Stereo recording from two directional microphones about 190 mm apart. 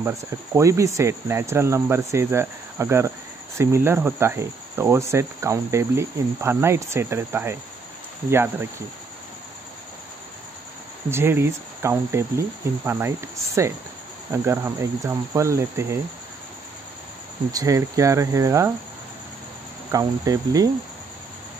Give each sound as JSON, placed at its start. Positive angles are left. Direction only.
{"t": 0.6, "sound": "cricket", "side_deg": -15}
{"t": 11.1, "sound": "cricket", "side_deg": -10}
{"t": 17.5, "sound": "cricket", "side_deg": -15}
{"t": 19.9, "sound": "cricket", "side_deg": -20}